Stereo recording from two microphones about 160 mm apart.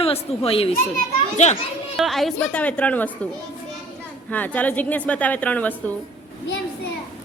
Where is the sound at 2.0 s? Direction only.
Centre (ahead or behind).